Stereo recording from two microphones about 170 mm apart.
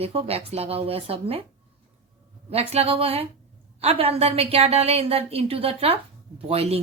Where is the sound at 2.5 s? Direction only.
35° right (ahead or behind).